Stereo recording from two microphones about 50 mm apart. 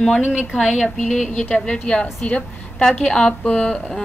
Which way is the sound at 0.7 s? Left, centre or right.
Centre.